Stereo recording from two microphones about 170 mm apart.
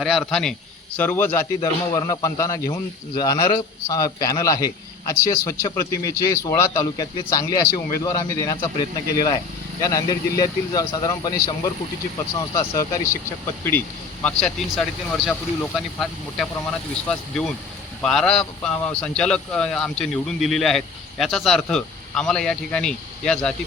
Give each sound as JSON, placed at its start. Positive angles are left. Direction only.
{"t": 0.0, "sound": "a man's voice", "side_deg": 0}
{"t": 18.0, "sound": "speech", "side_deg": 5}